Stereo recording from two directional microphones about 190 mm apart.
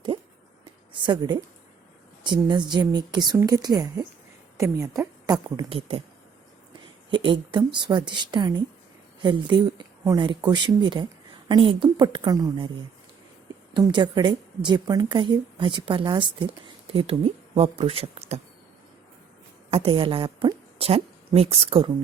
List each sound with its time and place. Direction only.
1.0 s a woman's voice: 20° right (ahead or behind)
7.1 s speech: 25° right (ahead or behind)
13.7 s speech: 25° right (ahead or behind)
19.7 s a woman's voice: 30° right (ahead or behind)